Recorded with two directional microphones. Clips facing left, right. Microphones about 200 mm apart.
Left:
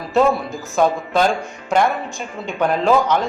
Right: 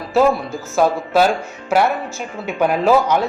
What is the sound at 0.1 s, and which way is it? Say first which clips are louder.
Speech: right 1 dB; centre (ahead or behind).